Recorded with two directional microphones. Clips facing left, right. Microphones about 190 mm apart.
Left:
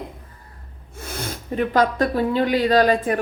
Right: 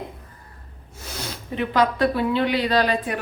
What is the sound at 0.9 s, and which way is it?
Speech, 55° left (ahead or behind).